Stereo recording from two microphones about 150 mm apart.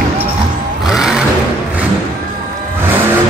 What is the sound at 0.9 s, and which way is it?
Vehicle, 5° right (ahead or behind).